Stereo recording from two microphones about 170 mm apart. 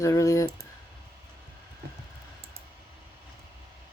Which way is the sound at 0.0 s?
20° left (ahead or behind).